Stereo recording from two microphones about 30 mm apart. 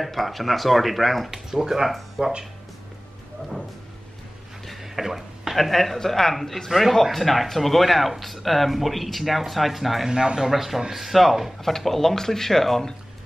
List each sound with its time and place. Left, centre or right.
0.0 s speech: centre
1.3 s speech: centre
4.8 s speech: centre
5.6 s speech: centre
10.0 s speech: right
10.5 s speech: centre
11.6 s speech: centre